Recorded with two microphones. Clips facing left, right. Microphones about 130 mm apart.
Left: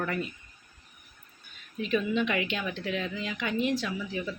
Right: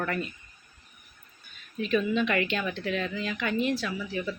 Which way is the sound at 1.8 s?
15° left (ahead or behind).